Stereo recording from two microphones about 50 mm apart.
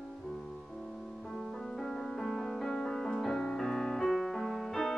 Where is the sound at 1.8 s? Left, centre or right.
Centre.